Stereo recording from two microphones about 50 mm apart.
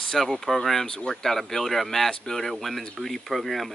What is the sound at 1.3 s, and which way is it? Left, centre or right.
Speech, centre.